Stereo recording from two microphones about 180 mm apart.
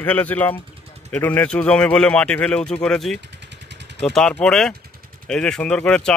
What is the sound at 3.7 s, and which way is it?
Vehicle, 75° right (ahead or behind).